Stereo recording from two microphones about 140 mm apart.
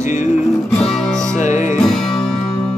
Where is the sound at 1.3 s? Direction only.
60° left (ahead or behind).